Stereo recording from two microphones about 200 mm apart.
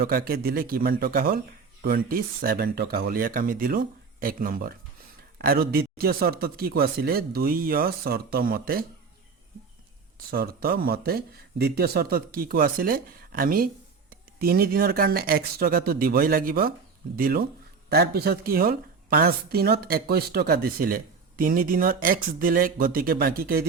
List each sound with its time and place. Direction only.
0.0 s a woman's voice: 50° right (ahead or behind)
10.3 s a woman's voice: 50° right (ahead or behind)